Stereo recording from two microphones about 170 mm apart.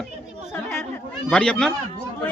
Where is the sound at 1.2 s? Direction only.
5° left (ahead or behind).